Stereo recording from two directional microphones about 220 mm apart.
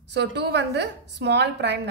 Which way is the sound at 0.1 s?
50° right (ahead or behind).